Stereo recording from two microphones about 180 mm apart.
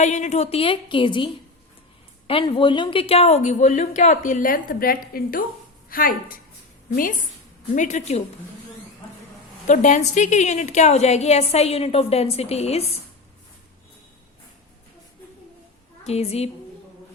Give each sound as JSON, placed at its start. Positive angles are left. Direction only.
{"t": 0.0, "sound": "a woman's voice", "side_deg": 40}
{"t": 9.6, "sound": "a woman's voice", "side_deg": 40}
{"t": 16.0, "sound": "a woman's voice", "side_deg": 35}